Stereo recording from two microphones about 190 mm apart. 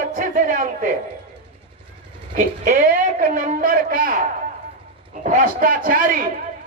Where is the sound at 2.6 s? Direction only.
45° right (ahead or behind).